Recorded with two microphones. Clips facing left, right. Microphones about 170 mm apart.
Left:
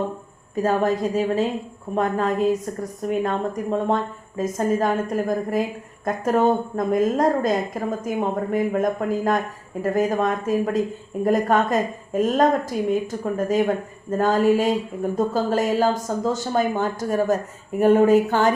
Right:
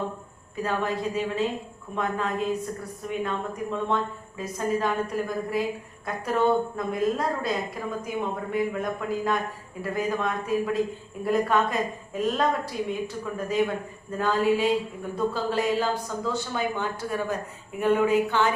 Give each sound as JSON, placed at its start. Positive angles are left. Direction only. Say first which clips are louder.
{"t": 0.5, "sound": "a woman's voice", "louder": "left 7 dB", "side_deg": 40}